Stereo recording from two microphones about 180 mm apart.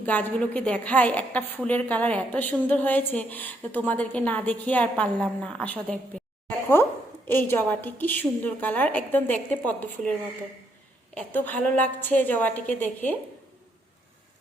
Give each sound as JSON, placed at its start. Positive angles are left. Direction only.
{"t": 0.0, "sound": "a woman's voice", "side_deg": 10}
{"t": 7.3, "sound": "a woman's voice", "side_deg": 10}